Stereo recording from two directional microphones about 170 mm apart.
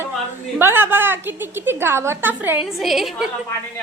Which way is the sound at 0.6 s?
15° right (ahead or behind).